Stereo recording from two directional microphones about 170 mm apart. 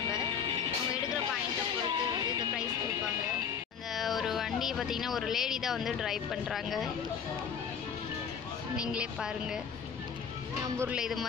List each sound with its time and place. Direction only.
1.9 s music: 25° right (ahead or behind)
3.9 s speech: centre (ahead or behind)
8.7 s a woman's voice: 5° right (ahead or behind)
10.8 s a woman's voice: 5° right (ahead or behind)